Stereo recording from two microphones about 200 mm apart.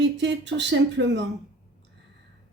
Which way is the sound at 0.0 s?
60° right (ahead or behind).